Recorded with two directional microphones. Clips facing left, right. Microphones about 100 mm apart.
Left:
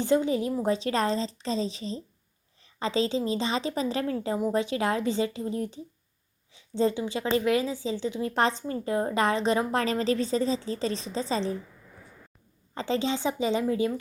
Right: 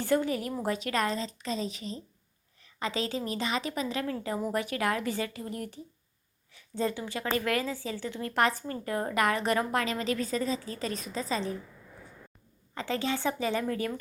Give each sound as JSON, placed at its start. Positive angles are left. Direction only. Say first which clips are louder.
{"t": 0.0, "sound": "a woman's voice", "louder": "left 4 dB", "side_deg": 20}
{"t": 9.7, "sound": "a woman's voice", "louder": "left 4 dB", "side_deg": 35}
{"t": 12.7, "sound": "a woman's voice", "louder": "left 3 dB", "side_deg": 25}